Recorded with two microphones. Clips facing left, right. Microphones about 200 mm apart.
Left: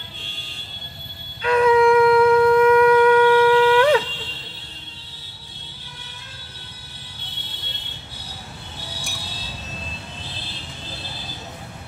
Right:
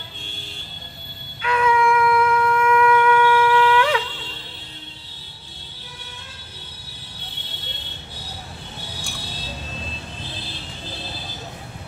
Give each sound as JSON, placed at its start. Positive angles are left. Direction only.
{"t": 1.4, "sound": "shofar", "side_deg": 35}